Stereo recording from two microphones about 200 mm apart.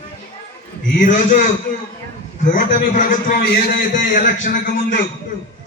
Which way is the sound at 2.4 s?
40° left (ahead or behind).